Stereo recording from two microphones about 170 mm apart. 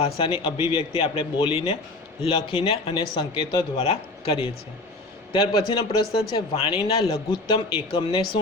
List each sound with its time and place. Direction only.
0.0 s speech: 30° left (ahead or behind)